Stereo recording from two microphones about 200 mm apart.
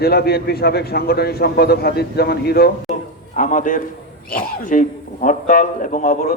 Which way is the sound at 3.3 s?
40° left (ahead or behind).